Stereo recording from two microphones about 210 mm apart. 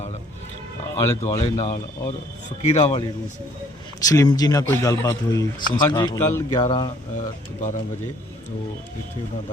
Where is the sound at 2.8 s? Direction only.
30° left (ahead or behind).